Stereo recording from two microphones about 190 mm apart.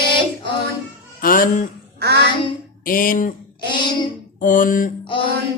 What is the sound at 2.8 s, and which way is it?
Speech, 45° left (ahead or behind).